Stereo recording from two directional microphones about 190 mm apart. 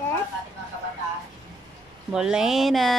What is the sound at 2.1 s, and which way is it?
Speech, 5° right (ahead or behind).